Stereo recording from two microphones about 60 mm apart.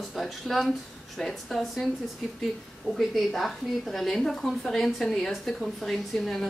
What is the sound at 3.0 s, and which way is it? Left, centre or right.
Speech, centre.